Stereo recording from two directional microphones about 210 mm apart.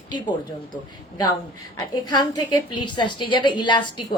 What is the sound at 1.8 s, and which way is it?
A woman's voice, 20° left (ahead or behind).